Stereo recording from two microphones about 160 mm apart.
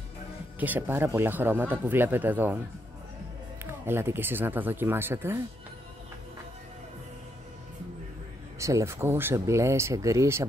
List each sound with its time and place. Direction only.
0.6 s speech: 10° right (ahead or behind)
3.8 s speech: 15° right (ahead or behind)
8.5 s speech: 20° right (ahead or behind)